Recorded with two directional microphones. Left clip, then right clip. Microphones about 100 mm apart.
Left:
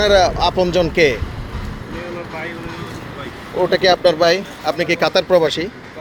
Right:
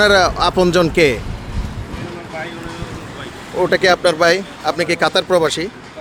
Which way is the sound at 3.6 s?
90° right.